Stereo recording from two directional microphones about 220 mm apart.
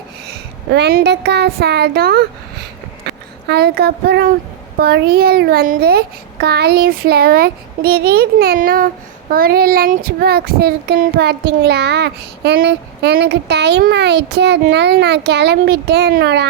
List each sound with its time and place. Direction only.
0.3 s speech: 50° right (ahead or behind)
4.8 s child singing: 45° right (ahead or behind)